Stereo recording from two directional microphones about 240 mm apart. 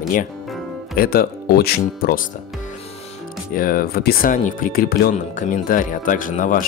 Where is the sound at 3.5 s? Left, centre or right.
Left.